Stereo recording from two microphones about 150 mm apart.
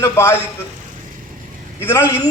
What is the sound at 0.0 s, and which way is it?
Speech, 20° left (ahead or behind).